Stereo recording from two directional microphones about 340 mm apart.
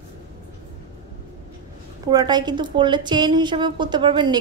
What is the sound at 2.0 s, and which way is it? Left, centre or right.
A woman's voice, centre.